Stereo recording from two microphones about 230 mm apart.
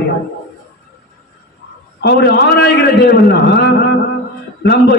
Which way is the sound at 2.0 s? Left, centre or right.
Left.